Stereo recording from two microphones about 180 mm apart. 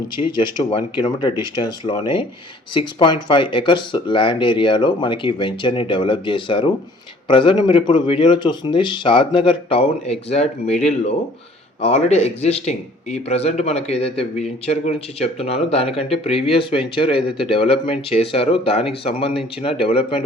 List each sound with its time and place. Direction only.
0.3 s a man's voice: 25° left (ahead or behind)